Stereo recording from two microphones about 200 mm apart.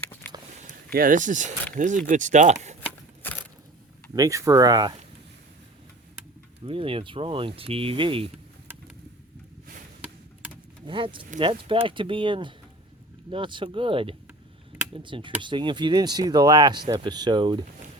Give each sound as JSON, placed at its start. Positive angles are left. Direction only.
{"t": 0.6, "sound": "speech", "side_deg": -45}
{"t": 3.2, "sound": "a sound", "side_deg": 10}
{"t": 4.1, "sound": "speech", "side_deg": -15}
{"t": 6.7, "sound": "speech", "side_deg": -25}
{"t": 10.8, "sound": "speech", "side_deg": -25}